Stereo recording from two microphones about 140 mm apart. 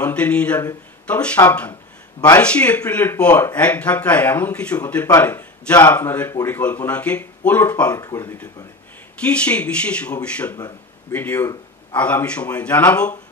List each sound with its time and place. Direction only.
0.0 s speech: 10° left (ahead or behind)
7.9 s speech: 25° left (ahead or behind)